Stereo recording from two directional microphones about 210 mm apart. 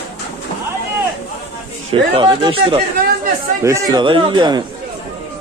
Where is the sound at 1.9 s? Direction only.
25° right (ahead or behind).